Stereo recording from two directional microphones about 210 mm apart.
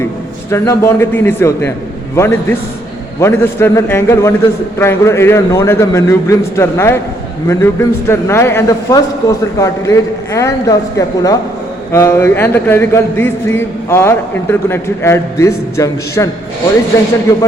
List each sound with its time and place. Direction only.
0.5 s a man's voice: 15° left (ahead or behind)